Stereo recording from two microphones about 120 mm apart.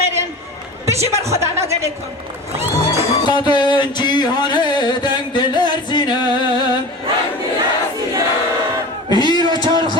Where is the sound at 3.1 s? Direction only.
40° left (ahead or behind).